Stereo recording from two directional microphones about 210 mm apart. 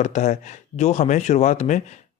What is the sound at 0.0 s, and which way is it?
Speech, 35° left (ahead or behind).